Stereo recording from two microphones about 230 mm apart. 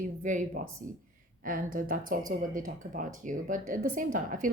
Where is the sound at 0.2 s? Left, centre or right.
Right.